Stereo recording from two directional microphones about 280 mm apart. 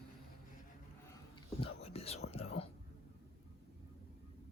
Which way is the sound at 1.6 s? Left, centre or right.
Left.